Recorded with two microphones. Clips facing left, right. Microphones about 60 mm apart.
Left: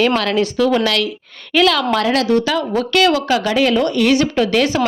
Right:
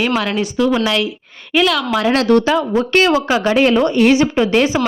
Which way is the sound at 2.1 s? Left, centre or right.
Right.